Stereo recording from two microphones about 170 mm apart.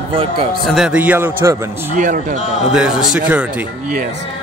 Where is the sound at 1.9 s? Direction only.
50° right (ahead or behind).